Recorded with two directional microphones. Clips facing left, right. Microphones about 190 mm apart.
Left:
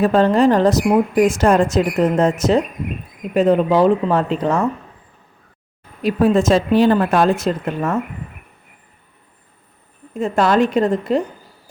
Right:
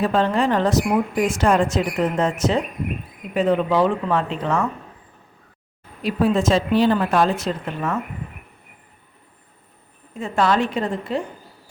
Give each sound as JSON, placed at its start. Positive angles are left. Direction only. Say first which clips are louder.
{"t": 0.0, "sound": "speech", "louder": "left 6 dB", "side_deg": 40}
{"t": 6.0, "sound": "speech", "louder": "left 4 dB", "side_deg": 45}
{"t": 10.2, "sound": "speech", "louder": "left 4 dB", "side_deg": 45}